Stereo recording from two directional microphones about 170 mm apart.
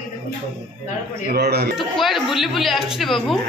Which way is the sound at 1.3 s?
70° right (ahead or behind).